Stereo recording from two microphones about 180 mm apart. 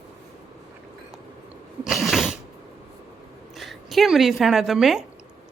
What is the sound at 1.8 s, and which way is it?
Sneeze, centre (ahead or behind).